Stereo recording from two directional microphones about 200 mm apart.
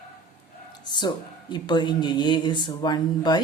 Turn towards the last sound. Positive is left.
turn(degrees=20)  # may be behind; listen again after turning